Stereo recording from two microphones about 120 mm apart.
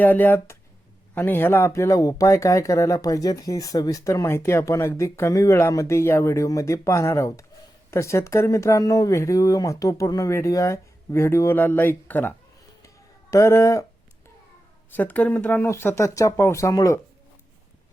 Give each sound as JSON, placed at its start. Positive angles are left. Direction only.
{"t": 0.0, "sound": "speech", "side_deg": 15}
{"t": 13.3, "sound": "speech", "side_deg": 25}
{"t": 14.8, "sound": "speech", "side_deg": 15}